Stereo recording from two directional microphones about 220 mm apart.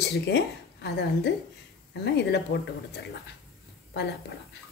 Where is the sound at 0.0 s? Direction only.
50° left (ahead or behind).